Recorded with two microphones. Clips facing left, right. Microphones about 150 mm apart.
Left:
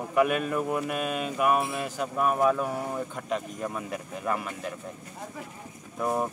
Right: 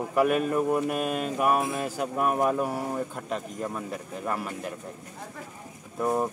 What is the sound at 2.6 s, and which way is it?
Speech, 10° right (ahead or behind).